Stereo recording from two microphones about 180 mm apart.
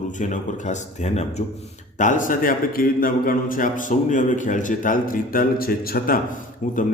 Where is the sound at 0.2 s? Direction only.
45° left (ahead or behind).